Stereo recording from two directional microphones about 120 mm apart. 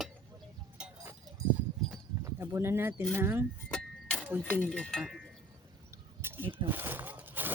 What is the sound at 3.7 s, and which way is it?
Music, 10° left (ahead or behind).